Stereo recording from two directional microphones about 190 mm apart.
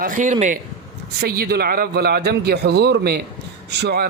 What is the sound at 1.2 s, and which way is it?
A man's voice, 55° right (ahead or behind).